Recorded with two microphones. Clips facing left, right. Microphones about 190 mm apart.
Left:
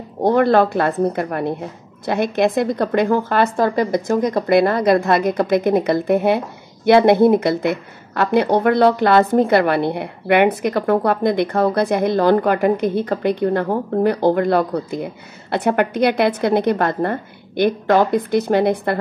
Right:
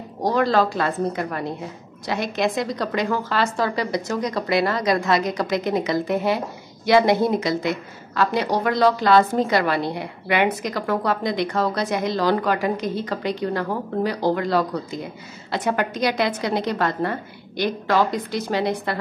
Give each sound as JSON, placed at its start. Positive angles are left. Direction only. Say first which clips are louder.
{"t": 0.2, "sound": "a woman's voice", "louder": "left 5 dB", "side_deg": 55}